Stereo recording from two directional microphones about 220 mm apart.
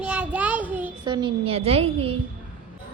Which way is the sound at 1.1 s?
20° right (ahead or behind).